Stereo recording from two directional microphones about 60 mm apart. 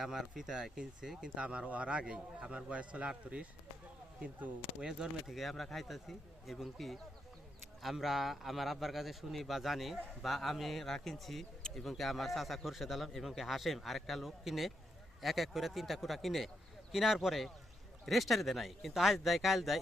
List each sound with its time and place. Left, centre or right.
0.0 s a man's voice: centre
4.2 s a man's voice: right
4.8 s a man's voice: centre